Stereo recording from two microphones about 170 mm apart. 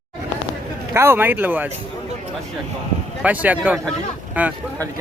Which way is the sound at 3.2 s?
10° right (ahead or behind).